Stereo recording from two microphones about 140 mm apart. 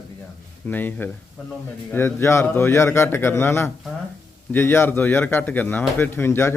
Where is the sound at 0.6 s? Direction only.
15° left (ahead or behind).